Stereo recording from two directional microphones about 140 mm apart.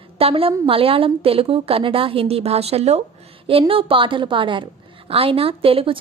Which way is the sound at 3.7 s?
40° right (ahead or behind).